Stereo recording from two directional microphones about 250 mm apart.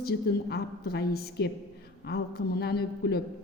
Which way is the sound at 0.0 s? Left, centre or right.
Left.